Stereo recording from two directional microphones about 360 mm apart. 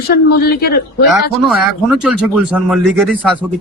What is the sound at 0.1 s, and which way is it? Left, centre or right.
Speech, left.